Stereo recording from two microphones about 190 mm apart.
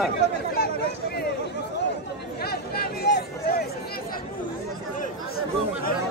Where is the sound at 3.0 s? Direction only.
55° left (ahead or behind).